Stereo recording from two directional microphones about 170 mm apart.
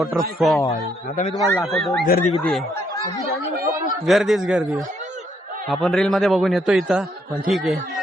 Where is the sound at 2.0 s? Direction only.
60° left (ahead or behind).